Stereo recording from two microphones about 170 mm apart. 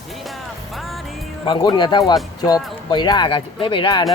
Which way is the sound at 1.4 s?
25° left (ahead or behind).